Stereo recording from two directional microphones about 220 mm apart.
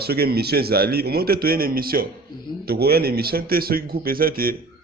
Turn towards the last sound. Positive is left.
turn(degrees=-40)  # may be behind; listen again after turning